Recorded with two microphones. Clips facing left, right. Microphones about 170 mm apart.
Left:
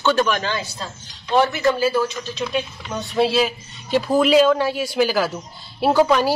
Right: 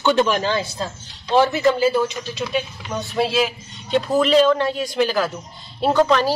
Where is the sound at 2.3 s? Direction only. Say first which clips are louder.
Even; centre (ahead or behind).